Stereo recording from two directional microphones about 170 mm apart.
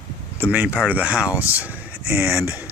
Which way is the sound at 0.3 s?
10° right (ahead or behind).